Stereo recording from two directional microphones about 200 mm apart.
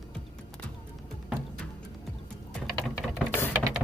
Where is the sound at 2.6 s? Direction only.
5° right (ahead or behind).